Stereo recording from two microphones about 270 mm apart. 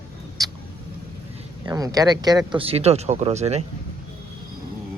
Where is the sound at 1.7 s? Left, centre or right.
Centre.